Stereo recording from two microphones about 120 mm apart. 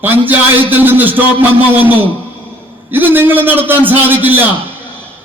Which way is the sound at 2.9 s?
15° right (ahead or behind).